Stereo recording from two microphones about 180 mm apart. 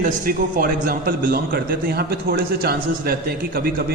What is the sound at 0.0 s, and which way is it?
A man's voice, 50° right (ahead or behind).